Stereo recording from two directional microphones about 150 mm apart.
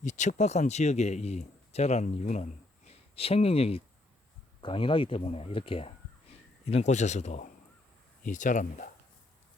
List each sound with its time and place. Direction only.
0.0 s speech: 55° left (ahead or behind); by 5.9 s 35° left (ahead or behind)
6.7 s speech: 45° left (ahead or behind)